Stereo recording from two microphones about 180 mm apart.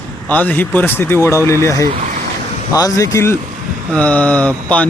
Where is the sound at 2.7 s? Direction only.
20° left (ahead or behind).